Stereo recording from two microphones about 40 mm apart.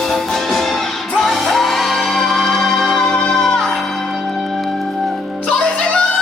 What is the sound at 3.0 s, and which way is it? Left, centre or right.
Music, left.